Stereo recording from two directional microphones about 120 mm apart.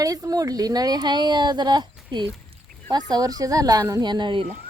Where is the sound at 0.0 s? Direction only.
30° right (ahead or behind).